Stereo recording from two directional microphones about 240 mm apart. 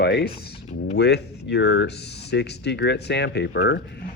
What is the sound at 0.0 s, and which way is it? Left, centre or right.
Speech, left.